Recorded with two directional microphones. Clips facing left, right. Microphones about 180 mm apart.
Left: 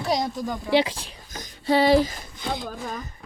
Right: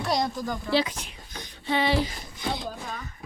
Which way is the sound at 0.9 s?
35° left (ahead or behind).